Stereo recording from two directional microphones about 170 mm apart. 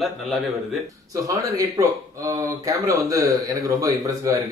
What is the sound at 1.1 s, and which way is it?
Speech, 20° right (ahead or behind).